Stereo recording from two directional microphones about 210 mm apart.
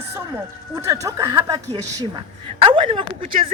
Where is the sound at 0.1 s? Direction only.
15° right (ahead or behind).